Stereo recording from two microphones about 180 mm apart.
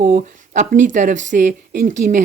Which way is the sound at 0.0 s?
45° right (ahead or behind).